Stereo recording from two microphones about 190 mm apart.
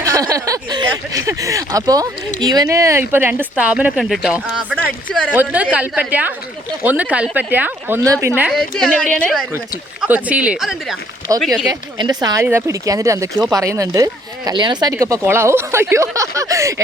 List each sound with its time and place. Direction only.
0.0 s speech: 15° right (ahead or behind)
8.4 s a woman's voice: centre (ahead or behind)
11.7 s speech: 20° right (ahead or behind)